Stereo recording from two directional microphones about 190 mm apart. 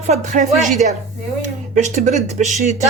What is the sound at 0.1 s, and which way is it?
Speech, 40° right (ahead or behind).